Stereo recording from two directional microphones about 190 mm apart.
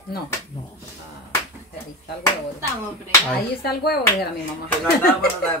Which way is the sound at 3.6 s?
55° left (ahead or behind).